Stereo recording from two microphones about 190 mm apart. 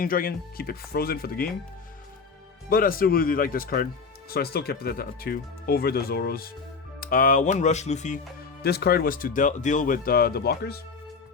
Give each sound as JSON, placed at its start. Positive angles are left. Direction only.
{"t": 0.0, "sound": "speech", "side_deg": 50}
{"t": 2.6, "sound": "speech", "side_deg": 50}
{"t": 8.6, "sound": "speech", "side_deg": 55}